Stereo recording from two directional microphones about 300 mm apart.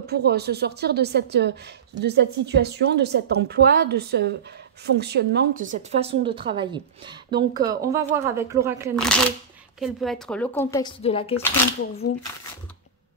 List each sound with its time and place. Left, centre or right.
0.0 s a woman's voice: right; by 11.4 s centre